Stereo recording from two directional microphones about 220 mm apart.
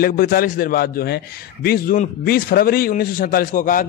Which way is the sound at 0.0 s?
40° left (ahead or behind).